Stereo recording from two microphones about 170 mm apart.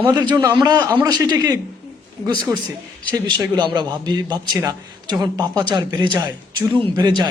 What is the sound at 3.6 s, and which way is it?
A man's voice, 25° right (ahead or behind).